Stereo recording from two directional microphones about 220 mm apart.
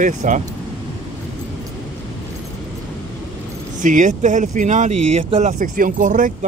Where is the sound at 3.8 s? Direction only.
35° right (ahead or behind).